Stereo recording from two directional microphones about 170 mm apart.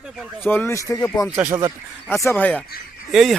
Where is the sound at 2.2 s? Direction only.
10° left (ahead or behind).